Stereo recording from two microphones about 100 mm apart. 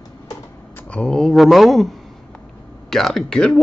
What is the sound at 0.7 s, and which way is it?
Speech, 10° left (ahead or behind).